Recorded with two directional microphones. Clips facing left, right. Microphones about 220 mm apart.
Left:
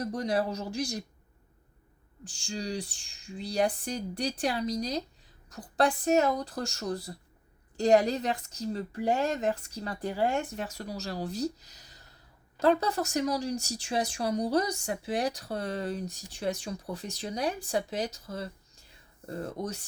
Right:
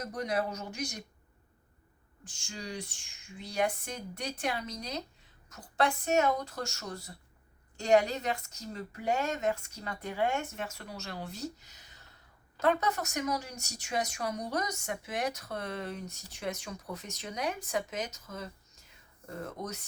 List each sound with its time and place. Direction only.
0.0 s speech: 30° left (ahead or behind)
2.2 s speech: 35° left (ahead or behind)